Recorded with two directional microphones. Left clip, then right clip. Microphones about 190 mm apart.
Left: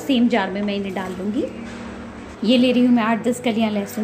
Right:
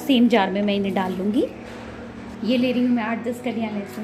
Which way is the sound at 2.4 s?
20° left (ahead or behind).